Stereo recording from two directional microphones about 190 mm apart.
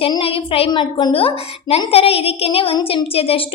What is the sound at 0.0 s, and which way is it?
A woman's voice, 30° left (ahead or behind).